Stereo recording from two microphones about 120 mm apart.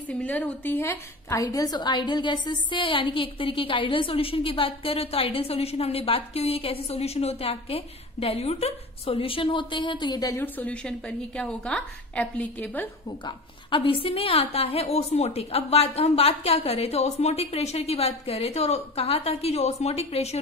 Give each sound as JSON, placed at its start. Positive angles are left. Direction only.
{"t": 0.1, "sound": "a woman's voice", "side_deg": 10}
{"t": 10.3, "sound": "a woman's voice", "side_deg": 15}
{"t": 13.2, "sound": "a woman's voice", "side_deg": 45}